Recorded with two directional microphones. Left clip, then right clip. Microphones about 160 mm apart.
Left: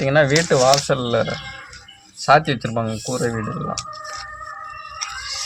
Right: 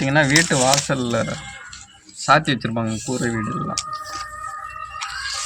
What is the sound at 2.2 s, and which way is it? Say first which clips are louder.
Speech: left 1 dB; 65° left (ahead or behind).